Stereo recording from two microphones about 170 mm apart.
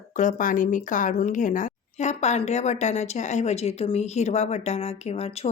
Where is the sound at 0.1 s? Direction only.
50° left (ahead or behind).